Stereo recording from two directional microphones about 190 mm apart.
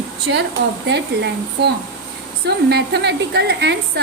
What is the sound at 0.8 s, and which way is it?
A woman's voice, 65° right (ahead or behind).